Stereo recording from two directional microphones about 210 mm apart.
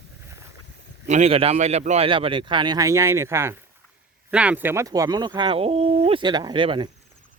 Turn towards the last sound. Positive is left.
turn(degrees=-25)  # may be behind; listen again after turning